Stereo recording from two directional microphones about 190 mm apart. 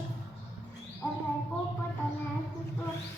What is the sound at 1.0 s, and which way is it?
Bird, 10° left (ahead or behind).